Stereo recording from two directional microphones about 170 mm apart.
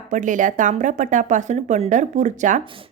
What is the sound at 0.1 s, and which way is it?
Speech, 50° right (ahead or behind).